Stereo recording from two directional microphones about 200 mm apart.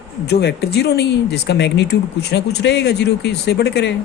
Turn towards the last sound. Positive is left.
turn(degrees=60)  # may be behind; listen again after turning